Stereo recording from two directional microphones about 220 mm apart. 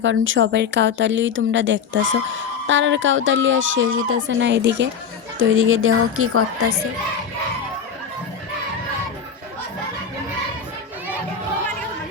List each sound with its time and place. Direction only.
0.0 s speech: 60° right (ahead or behind); by 6.7 s 75° right (ahead or behind)